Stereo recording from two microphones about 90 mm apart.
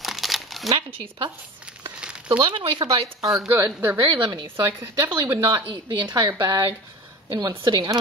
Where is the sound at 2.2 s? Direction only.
55° right (ahead or behind).